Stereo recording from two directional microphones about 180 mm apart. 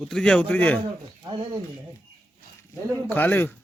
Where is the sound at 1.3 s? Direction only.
25° right (ahead or behind).